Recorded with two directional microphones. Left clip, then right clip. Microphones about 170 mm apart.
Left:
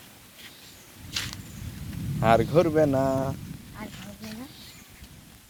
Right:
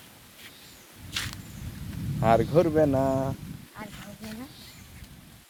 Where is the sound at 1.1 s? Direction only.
20° left (ahead or behind).